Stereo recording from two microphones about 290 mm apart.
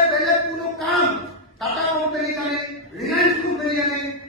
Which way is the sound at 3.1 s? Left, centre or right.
Left.